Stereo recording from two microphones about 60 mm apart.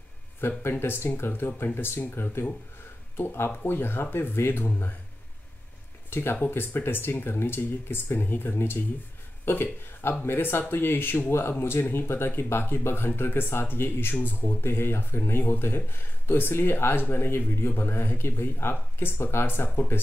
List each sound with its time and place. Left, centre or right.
0.5 s speech: left
6.0 s speech: left